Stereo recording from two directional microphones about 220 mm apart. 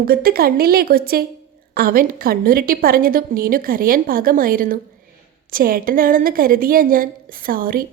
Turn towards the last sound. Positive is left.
turn(degrees=-40)  # may be behind; listen again after turning